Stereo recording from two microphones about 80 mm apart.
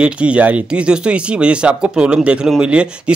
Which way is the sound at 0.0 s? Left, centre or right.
Centre.